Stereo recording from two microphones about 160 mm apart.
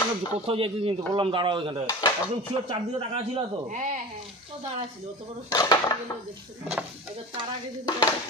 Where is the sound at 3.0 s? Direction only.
35° right (ahead or behind).